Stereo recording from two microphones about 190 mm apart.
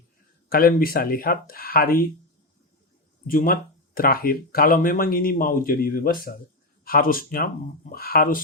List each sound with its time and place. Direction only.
0.5 s speech: 50° left (ahead or behind)
3.2 s speech: 50° left (ahead or behind)